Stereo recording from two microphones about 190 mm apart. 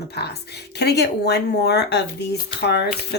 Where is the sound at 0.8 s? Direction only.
60° left (ahead or behind).